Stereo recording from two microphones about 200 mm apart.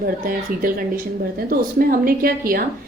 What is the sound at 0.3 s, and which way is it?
A woman's voice, 45° right (ahead or behind).